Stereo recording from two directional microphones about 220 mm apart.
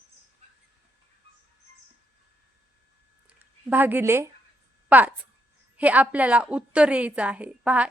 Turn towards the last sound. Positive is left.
turn(degrees=-5)  # may be behind; listen again after turning